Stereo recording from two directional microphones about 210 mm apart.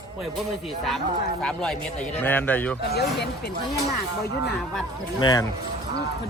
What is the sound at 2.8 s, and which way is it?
Speech, 50° left (ahead or behind).